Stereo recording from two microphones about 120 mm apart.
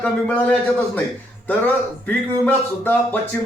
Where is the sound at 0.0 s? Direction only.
15° left (ahead or behind).